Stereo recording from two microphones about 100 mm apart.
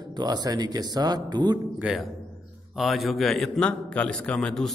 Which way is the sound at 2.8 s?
Centre (ahead or behind).